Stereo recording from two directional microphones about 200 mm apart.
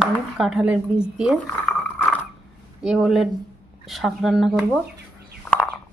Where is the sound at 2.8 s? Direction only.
Centre (ahead or behind).